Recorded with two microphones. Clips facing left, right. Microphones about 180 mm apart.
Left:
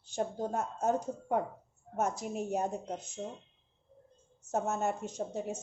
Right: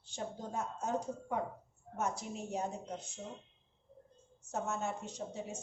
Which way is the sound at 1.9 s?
45° left (ahead or behind).